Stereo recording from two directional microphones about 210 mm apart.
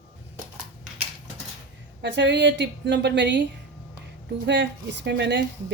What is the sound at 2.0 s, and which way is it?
A woman's voice, 55° right (ahead or behind).